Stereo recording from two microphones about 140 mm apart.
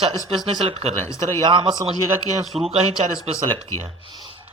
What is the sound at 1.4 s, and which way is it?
Speech, 35° right (ahead or behind).